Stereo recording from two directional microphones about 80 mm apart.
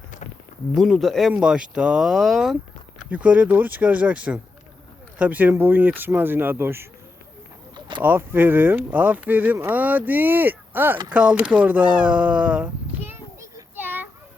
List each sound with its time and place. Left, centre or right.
0.8 s speech: centre
1.3 s speech: centre
3.1 s speech: centre
8.0 s speech: right
13.7 s a sound: right